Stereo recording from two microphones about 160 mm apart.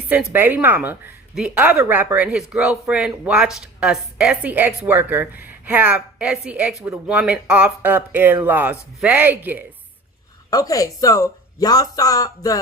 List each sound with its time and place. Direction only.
0.1 s speech: 10° right (ahead or behind)
10.5 s speech: 20° left (ahead or behind)